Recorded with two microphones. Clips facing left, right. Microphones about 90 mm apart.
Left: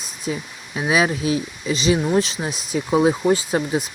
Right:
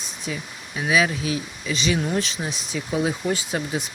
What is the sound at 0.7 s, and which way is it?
Speech, 30° left (ahead or behind).